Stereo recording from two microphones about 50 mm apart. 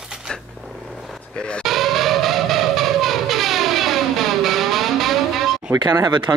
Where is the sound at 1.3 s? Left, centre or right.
Centre.